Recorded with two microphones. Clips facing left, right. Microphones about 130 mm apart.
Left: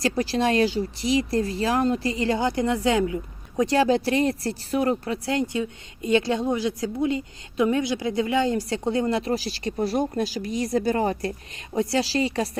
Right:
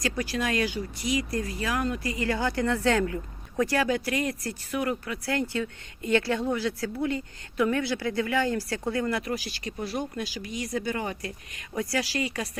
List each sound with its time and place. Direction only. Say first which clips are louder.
0.0 s speech: left 6 dB; 30° left (ahead or behind)